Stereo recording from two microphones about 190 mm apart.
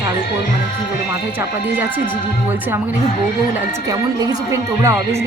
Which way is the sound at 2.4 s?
10° right (ahead or behind).